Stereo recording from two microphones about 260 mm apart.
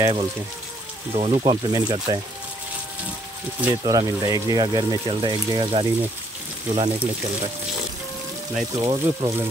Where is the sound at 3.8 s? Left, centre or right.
Centre.